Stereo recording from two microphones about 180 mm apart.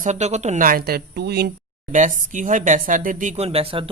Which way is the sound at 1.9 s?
45° right (ahead or behind).